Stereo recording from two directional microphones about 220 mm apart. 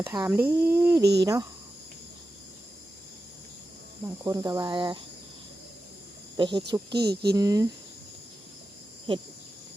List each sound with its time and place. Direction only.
0.0 s speech: 15° right (ahead or behind)
4.0 s speech: 15° right (ahead or behind)
6.3 s speech: 20° right (ahead or behind)
7.0 s speech: 45° right (ahead or behind)
7.3 s speech: 15° right (ahead or behind)